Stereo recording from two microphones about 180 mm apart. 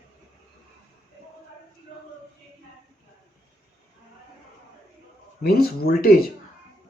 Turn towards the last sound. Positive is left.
turn(degrees=55)  # may be behind; listen again after turning